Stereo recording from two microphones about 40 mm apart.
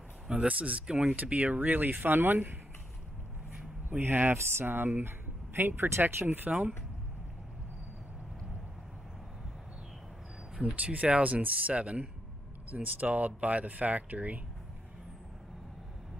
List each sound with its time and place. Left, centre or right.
0.5 s speech: right
1.1 s speech: right
3.9 s speech: right
5.6 s speech: right
6.2 s speech: right
10.8 s speech: right